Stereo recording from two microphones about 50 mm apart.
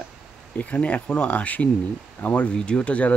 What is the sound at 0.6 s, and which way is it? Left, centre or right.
Speech, left.